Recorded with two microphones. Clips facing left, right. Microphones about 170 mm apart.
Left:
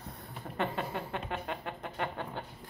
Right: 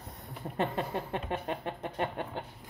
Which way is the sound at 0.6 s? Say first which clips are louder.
Right 2 dB; 30° right (ahead or behind).